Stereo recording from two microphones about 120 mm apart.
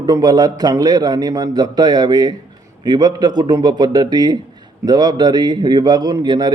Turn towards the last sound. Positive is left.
turn(degrees=-35)  # may be behind; listen again after turning